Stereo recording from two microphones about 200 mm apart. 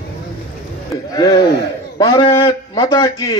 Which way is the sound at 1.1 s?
20° left (ahead or behind).